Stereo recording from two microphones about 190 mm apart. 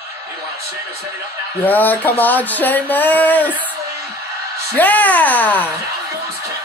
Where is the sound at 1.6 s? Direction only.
10° left (ahead or behind).